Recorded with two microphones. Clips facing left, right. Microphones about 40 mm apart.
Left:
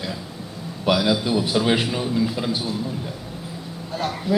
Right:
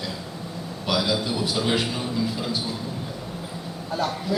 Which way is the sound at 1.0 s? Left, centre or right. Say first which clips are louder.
Left 4 dB; centre.